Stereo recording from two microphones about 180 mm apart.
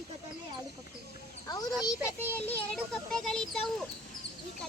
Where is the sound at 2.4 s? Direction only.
5° left (ahead or behind).